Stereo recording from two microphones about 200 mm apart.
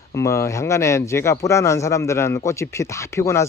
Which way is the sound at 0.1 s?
15° left (ahead or behind).